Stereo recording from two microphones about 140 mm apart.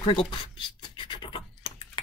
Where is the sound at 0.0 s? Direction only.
40° left (ahead or behind).